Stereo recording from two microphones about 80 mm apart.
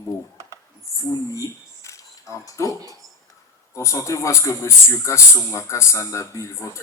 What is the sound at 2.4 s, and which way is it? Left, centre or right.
Speech, left.